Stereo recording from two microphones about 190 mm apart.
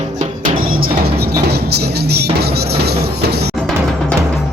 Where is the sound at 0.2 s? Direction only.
50° right (ahead or behind).